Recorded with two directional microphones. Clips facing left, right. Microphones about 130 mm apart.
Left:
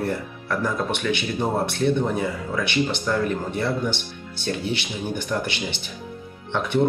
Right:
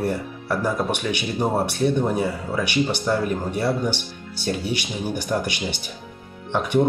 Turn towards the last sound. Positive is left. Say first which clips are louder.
# right 3 dB
turn(degrees=-15)  # may be behind; listen again after turning